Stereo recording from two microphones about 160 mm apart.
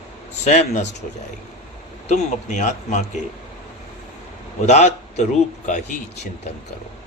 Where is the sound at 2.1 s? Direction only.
50° left (ahead or behind).